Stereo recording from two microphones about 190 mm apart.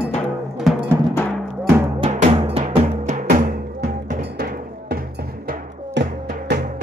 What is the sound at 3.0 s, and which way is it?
Music, 40° right (ahead or behind).